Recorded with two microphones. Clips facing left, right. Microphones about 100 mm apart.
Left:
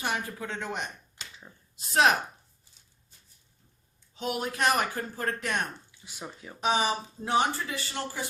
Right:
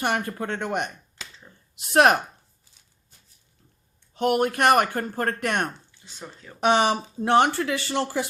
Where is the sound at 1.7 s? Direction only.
70° right (ahead or behind).